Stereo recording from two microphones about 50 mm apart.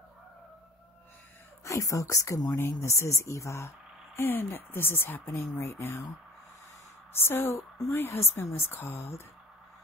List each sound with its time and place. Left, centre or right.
1.6 s speech: left
2.5 s speech: left
4.2 s speech: left
7.2 s speech: left
7.9 s a woman's voice: left
8.7 s speech: left